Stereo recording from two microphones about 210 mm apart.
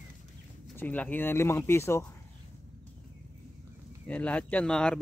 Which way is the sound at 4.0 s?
5° left (ahead or behind).